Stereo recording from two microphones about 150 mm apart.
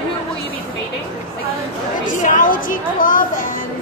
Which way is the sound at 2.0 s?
60° left (ahead or behind).